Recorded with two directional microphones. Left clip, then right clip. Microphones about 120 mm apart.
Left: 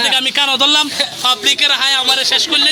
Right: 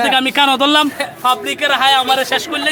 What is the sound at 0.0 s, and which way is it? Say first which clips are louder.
Speech: right 1 dB; 90° right.